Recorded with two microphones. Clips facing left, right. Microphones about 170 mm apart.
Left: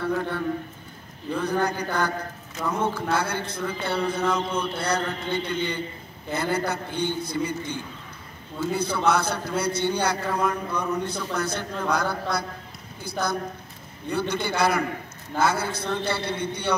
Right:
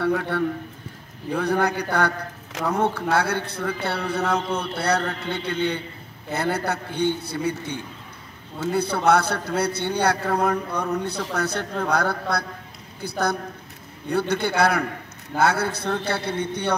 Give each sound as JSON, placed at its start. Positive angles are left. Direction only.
{"t": 0.0, "sound": "a man's voice", "side_deg": -70}
{"t": 8.7, "sound": "a man's voice", "side_deg": -65}